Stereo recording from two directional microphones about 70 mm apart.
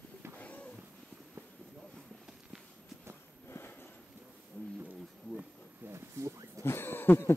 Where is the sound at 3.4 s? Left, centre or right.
Left.